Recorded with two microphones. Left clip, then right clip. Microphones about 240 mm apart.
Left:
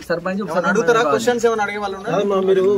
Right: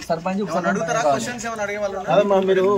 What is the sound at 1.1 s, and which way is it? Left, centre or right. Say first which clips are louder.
Speech: left 6 dB; left.